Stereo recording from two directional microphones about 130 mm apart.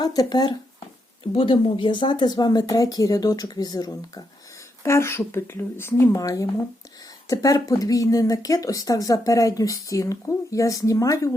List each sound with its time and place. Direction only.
0.0 s speech: 30° left (ahead or behind)
1.2 s speech: 45° left (ahead or behind)
4.8 s speech: 20° left (ahead or behind)